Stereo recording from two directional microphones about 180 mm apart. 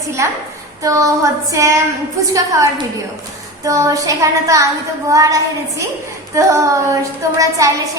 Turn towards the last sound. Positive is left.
turn(degrees=-20)  # may be behind; listen again after turning